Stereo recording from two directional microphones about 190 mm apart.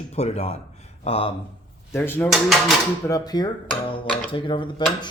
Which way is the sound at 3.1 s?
20° left (ahead or behind).